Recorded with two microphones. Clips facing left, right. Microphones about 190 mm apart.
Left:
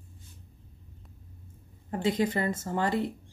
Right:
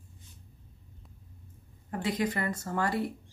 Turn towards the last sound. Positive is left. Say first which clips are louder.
# left 2 dB
turn(degrees=20)  # may be behind; listen again after turning